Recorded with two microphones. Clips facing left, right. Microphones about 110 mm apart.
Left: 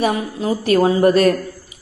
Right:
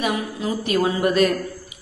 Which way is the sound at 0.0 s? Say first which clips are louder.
Left 5 dB; 35° left (ahead or behind).